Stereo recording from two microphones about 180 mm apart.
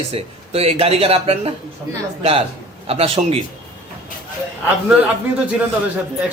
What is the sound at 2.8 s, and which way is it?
Speech, 35° right (ahead or behind).